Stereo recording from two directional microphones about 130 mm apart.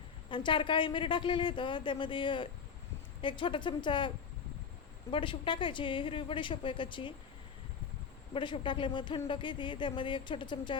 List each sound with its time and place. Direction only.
0.3 s speech: 40° left (ahead or behind)
5.1 s speech: 40° left (ahead or behind)
8.3 s speech: 40° left (ahead or behind)